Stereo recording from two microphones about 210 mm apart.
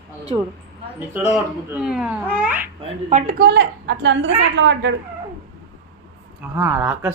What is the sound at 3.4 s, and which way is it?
A woman's voice, 50° right (ahead or behind).